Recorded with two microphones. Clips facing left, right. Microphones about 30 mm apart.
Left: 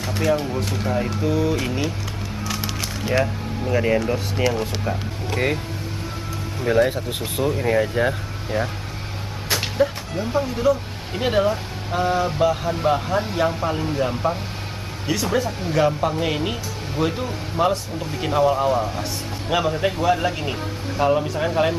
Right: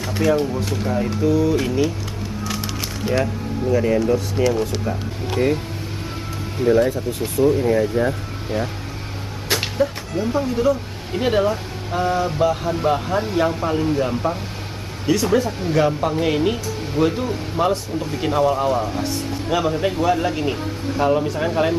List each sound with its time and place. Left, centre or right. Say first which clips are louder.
0.0 s speech: right 3 dB; centre
2.4 s music: even; centre
3.7 s speech: right 2 dB; left
6.9 s speech: right 3 dB; left
7.6 s speech: right 1 dB; left
9.8 s speech: even; centre